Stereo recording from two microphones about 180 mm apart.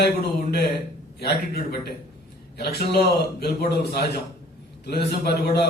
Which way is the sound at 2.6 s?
65° left (ahead or behind).